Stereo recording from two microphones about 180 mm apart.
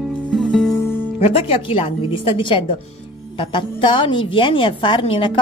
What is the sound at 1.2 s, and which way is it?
A woman's voice, 30° left (ahead or behind).